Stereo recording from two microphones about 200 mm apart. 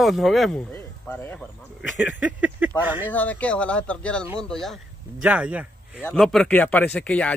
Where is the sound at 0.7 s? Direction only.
10° left (ahead or behind).